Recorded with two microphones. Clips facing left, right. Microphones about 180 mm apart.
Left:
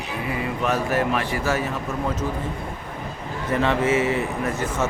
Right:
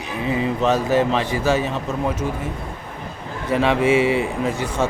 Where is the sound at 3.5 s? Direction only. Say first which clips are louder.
Right 4 dB; 15° right (ahead or behind).